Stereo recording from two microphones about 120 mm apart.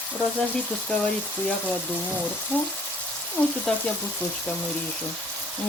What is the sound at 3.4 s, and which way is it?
Speech, 15° left (ahead or behind).